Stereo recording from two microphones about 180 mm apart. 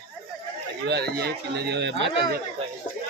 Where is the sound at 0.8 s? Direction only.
65° right (ahead or behind).